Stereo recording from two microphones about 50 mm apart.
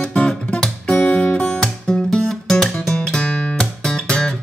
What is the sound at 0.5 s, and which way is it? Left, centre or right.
Guitar, centre.